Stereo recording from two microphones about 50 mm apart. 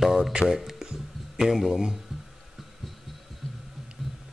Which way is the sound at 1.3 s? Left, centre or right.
Centre.